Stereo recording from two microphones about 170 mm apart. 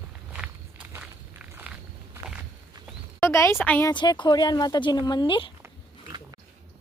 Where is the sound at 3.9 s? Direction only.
25° left (ahead or behind).